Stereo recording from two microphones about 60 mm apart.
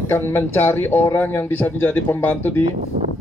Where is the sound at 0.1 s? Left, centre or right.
Left.